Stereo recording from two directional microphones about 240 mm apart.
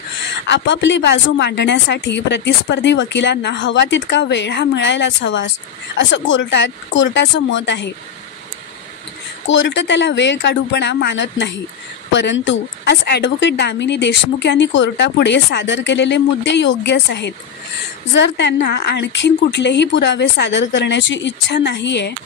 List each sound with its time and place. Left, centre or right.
0.5 s speech: left
9.5 s speech: left